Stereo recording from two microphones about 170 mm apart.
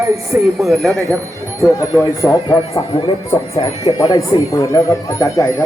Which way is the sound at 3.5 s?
35° left (ahead or behind).